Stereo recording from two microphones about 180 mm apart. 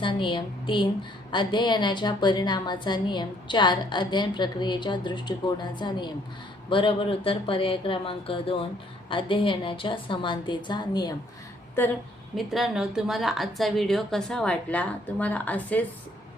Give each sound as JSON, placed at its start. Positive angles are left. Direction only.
{"t": 0.0, "sound": "a woman's voice", "side_deg": 25}
{"t": 12.4, "sound": "a woman's voice", "side_deg": 0}